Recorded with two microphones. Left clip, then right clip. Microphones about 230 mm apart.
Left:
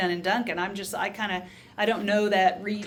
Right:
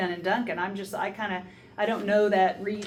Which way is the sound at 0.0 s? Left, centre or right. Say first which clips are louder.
Left 2 dB; left.